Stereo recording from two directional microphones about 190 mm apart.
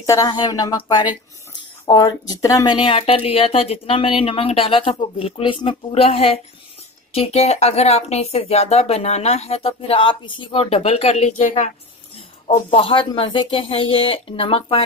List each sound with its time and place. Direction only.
0.0 s a woman's voice: 15° left (ahead or behind)